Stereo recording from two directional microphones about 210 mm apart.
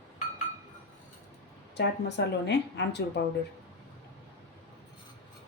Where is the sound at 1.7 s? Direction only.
55° left (ahead or behind).